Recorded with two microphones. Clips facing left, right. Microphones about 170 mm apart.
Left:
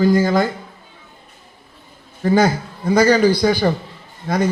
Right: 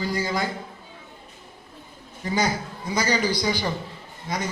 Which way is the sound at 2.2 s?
55° left (ahead or behind).